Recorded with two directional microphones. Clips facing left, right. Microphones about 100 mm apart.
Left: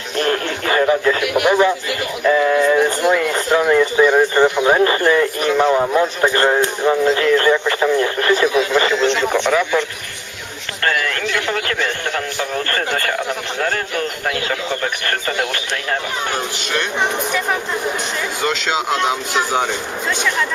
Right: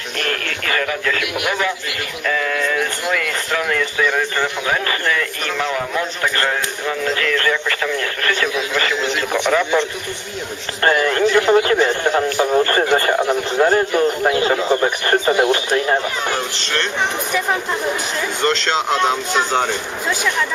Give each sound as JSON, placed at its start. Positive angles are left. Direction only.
{"t": 0.2, "sound": "radio", "side_deg": 25}
{"t": 1.4, "sound": "speech", "side_deg": 30}
{"t": 8.9, "sound": "speech", "side_deg": 0}
{"t": 10.8, "sound": "speech", "side_deg": -25}
{"t": 18.4, "sound": "speech", "side_deg": 5}